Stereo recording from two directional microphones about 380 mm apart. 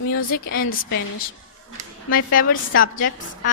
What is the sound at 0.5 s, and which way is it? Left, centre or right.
Speech, left.